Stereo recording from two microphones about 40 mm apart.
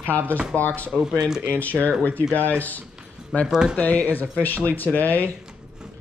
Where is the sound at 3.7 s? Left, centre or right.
Left.